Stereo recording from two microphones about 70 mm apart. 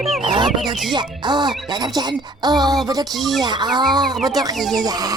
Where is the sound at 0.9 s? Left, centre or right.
Right.